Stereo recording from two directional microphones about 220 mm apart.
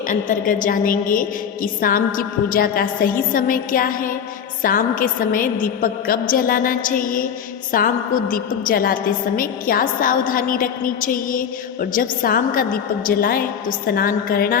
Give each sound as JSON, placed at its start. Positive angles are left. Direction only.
{"t": 0.1, "sound": "a woman's voice", "side_deg": 35}